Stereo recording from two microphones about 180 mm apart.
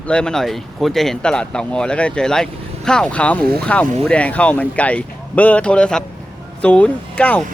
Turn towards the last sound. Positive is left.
turn(degrees=5)  # may be behind; listen again after turning